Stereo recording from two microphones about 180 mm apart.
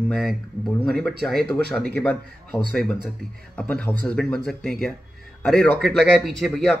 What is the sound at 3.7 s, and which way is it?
A man's voice, 5° left (ahead or behind).